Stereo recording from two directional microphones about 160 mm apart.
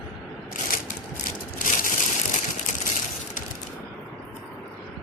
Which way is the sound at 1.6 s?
55° left (ahead or behind).